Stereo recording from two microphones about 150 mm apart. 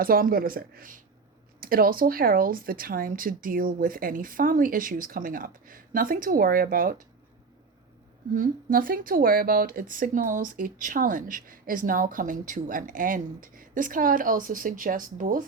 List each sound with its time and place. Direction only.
0.0 s speech: 75° right (ahead or behind)
8.4 s speech: 70° right (ahead or behind)